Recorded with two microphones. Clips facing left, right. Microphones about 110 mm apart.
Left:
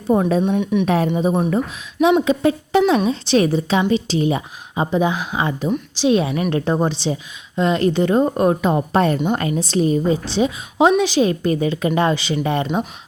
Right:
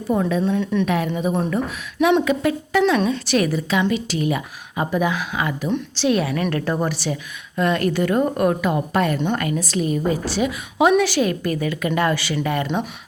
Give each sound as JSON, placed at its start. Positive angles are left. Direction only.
{"t": 0.1, "sound": "speech", "side_deg": 35}
{"t": 0.4, "sound": "speech", "side_deg": 20}
{"t": 0.9, "sound": "a woman's voice", "side_deg": 35}
{"t": 5.6, "sound": "speech", "side_deg": 10}
{"t": 6.1, "sound": "a woman's voice", "side_deg": 25}